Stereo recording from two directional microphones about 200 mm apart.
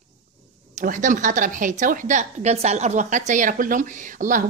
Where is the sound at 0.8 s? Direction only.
40° right (ahead or behind).